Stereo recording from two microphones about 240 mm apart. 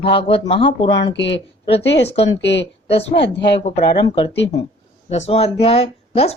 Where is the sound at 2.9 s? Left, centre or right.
Left.